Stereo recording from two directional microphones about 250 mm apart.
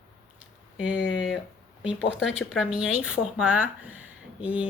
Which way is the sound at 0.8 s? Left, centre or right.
Centre.